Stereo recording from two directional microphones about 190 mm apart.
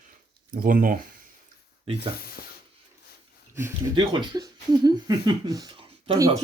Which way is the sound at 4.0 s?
20° right (ahead or behind).